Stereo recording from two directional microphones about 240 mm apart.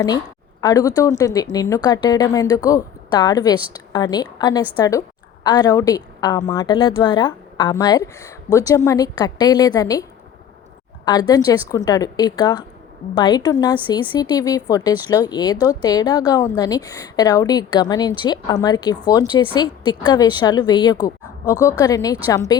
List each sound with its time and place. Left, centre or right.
0.6 s a woman's voice: centre